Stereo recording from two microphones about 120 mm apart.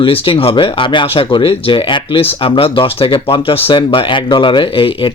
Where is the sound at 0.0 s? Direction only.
50° left (ahead or behind).